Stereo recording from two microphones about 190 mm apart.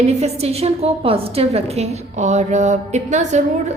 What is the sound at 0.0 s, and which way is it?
A woman's voice, 35° right (ahead or behind).